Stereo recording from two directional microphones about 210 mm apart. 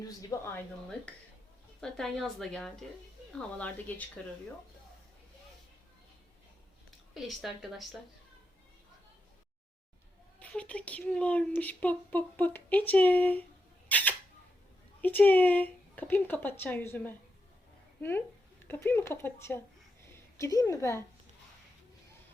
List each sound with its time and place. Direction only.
0.0 s speech: 15° left (ahead or behind)
1.8 s a woman's voice: centre (ahead or behind)
7.1 s a woman's voice: centre (ahead or behind)
10.4 s speech: 5° left (ahead or behind)
13.8 s a sound: 5° left (ahead or behind)
15.0 s speech: 10° left (ahead or behind)
18.7 s speech: 10° left (ahead or behind)